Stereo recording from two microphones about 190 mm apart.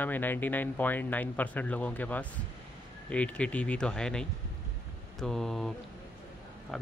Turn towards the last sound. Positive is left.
turn(degrees=0)  # may be behind; listen again after turning